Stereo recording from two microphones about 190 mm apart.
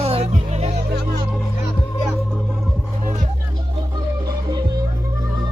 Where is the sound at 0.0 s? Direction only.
35° right (ahead or behind).